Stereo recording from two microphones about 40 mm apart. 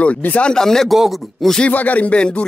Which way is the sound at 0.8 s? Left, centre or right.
Centre.